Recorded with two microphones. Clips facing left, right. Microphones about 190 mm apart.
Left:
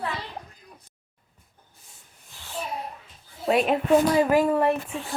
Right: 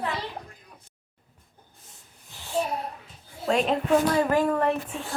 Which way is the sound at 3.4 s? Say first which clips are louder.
Left 2 dB; 10° left (ahead or behind).